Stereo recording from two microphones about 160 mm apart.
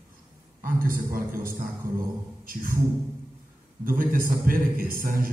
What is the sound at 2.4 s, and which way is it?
Speech, 60° right (ahead or behind).